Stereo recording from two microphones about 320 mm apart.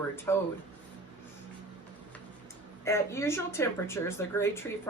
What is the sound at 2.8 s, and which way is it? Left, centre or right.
Speech, centre.